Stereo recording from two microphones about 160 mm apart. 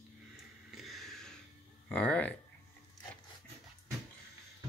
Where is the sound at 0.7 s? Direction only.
Centre (ahead or behind).